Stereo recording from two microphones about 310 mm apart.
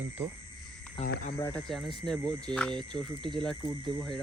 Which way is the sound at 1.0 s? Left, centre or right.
Left.